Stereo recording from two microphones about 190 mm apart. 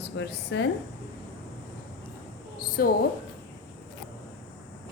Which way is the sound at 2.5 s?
55° left (ahead or behind).